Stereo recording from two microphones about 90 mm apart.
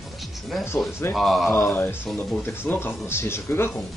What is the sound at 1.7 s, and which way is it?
Speech, 25° left (ahead or behind).